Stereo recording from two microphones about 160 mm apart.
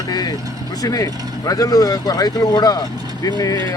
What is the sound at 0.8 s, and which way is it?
Speech, 20° left (ahead or behind).